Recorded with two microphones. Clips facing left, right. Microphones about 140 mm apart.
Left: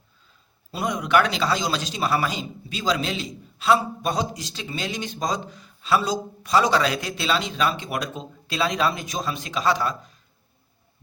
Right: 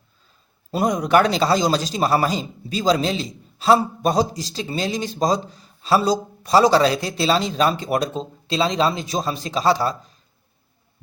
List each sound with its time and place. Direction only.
0.7 s speech: 40° right (ahead or behind)